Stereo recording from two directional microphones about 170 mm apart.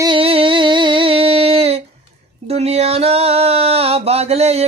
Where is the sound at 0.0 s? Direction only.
30° right (ahead or behind).